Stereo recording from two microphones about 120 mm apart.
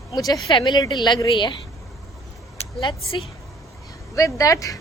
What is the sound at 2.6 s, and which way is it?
Vehicle, 55° left (ahead or behind).